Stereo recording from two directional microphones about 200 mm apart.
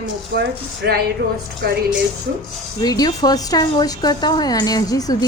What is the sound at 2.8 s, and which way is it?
A woman's voice, 20° left (ahead or behind).